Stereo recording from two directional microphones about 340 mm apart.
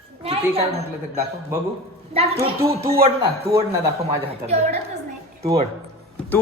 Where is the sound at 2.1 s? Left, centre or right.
Centre.